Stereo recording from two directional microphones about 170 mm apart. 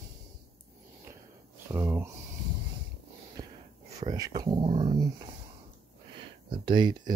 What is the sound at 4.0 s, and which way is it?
Speech, 20° right (ahead or behind).